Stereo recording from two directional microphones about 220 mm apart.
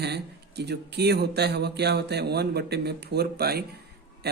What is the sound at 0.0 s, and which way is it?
Speech, 50° right (ahead or behind).